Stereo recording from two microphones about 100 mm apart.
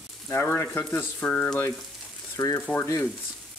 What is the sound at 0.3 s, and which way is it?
Speech, 25° left (ahead or behind).